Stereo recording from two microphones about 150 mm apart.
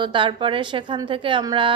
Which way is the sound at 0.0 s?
35° right (ahead or behind).